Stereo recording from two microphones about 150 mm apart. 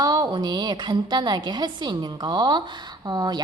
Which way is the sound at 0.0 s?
25° right (ahead or behind).